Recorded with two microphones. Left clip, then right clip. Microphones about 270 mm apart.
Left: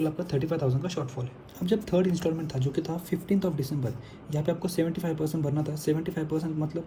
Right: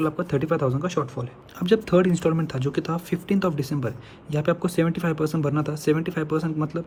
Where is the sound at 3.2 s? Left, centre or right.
Right.